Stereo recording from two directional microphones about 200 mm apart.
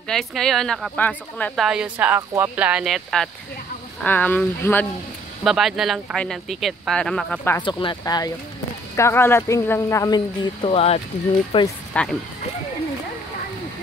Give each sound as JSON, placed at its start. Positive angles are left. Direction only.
{"t": 0.1, "sound": "speech", "side_deg": 0}
{"t": 1.7, "sound": "speech", "side_deg": -5}
{"t": 5.4, "sound": "speech", "side_deg": 0}
{"t": 7.6, "sound": "speech", "side_deg": 25}
{"t": 11.9, "sound": "speech", "side_deg": 5}